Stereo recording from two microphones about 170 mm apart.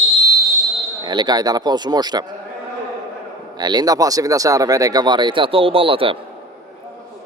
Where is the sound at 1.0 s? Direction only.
25° right (ahead or behind).